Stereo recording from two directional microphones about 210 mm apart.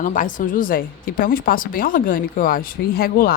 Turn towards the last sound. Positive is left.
turn(degrees=45)  # may be behind; listen again after turning